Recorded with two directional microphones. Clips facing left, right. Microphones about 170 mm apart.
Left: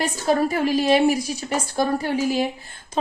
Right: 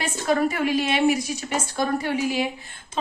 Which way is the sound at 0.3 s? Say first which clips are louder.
Left 1 dB; 35° left (ahead or behind).